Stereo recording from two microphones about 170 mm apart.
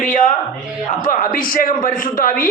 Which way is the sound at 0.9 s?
55° left (ahead or behind).